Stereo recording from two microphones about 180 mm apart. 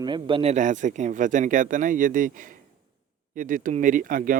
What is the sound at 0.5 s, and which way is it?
Speech, 45° right (ahead or behind).